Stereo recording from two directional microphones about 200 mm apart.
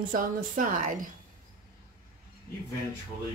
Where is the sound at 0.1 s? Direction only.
45° right (ahead or behind).